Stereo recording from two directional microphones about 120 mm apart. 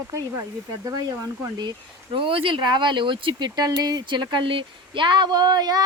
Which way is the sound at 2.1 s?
50° right (ahead or behind).